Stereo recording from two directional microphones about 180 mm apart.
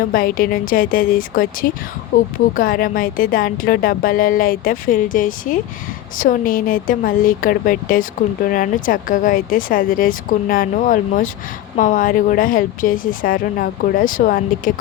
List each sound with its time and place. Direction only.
0.1 s a woman's voice: 50° left (ahead or behind)